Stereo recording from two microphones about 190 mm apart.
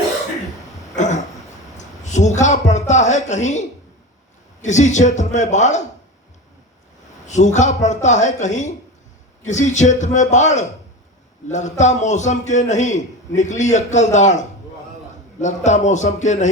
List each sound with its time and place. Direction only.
0.9 s a sound: 40° left (ahead or behind)
1.8 s a man's voice: 40° left (ahead or behind)
4.6 s a man's voice: 40° left (ahead or behind)
7.3 s a man's voice: 40° left (ahead or behind)